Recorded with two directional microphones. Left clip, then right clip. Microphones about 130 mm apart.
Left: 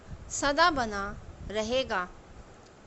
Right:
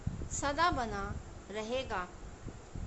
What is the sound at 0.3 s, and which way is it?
A woman's voice, 40° left (ahead or behind).